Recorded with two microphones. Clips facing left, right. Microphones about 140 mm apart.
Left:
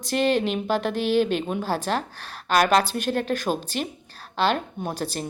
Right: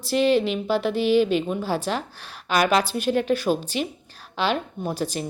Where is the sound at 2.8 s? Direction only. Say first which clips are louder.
Right 2 dB; 10° right (ahead or behind).